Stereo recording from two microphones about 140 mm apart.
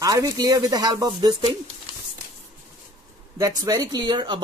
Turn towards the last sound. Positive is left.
turn(degrees=-35)  # may be behind; listen again after turning